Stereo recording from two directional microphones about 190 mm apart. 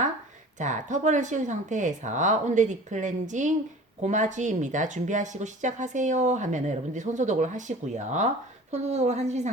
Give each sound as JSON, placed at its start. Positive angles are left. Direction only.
{"t": 0.6, "sound": "speech", "side_deg": -40}